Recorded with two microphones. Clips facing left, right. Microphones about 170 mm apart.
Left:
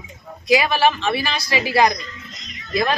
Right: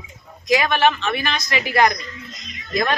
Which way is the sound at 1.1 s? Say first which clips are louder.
Left 1 dB; 30° left (ahead or behind).